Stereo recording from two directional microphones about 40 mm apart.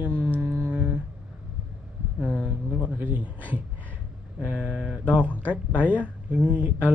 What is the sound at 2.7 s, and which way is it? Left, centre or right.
Speech, right.